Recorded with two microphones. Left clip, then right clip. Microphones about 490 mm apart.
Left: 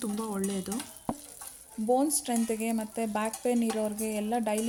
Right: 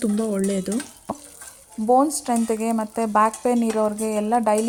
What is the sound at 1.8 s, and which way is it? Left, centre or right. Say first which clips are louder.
Speech: right 9 dB; left.